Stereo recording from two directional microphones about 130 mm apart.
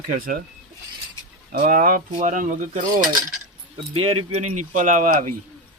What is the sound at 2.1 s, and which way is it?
Cutlery, 75° right (ahead or behind).